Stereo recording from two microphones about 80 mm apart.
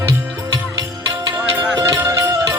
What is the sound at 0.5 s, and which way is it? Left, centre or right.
Music, right.